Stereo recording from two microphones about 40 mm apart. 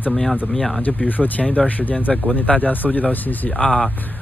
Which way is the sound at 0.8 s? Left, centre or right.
Left.